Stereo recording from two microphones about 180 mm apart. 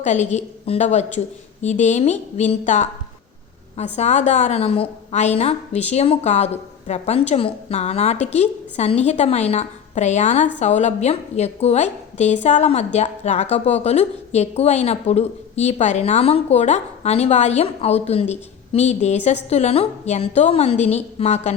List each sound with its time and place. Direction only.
0.0 s a woman's voice: 40° left (ahead or behind)
3.9 s a woman's voice: 40° left (ahead or behind)